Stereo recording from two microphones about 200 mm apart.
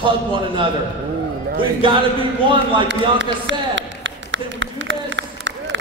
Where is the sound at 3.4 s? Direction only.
65° right (ahead or behind).